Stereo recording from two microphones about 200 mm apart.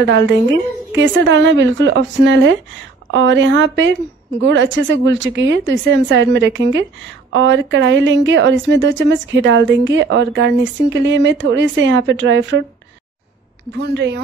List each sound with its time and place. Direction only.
0.0 s a woman's voice: 65° right (ahead or behind)
13.7 s a woman's voice: 55° right (ahead or behind)